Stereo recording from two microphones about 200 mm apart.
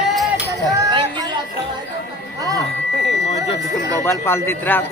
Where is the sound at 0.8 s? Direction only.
20° right (ahead or behind).